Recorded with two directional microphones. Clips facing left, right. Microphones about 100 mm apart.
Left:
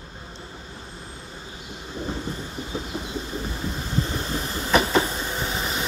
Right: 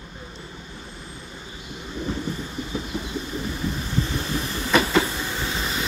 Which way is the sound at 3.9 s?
35° left (ahead or behind).